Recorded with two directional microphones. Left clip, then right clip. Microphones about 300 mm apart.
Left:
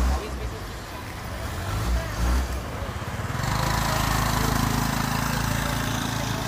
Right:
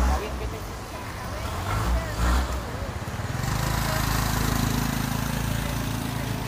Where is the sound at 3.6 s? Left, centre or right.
Centre.